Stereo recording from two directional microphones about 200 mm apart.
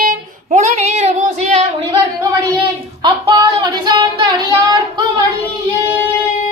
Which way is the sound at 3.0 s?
20° right (ahead or behind).